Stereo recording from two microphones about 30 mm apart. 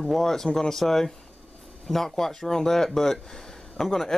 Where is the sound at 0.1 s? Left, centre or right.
Centre.